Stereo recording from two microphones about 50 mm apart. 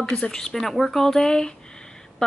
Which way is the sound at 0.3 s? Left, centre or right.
Centre.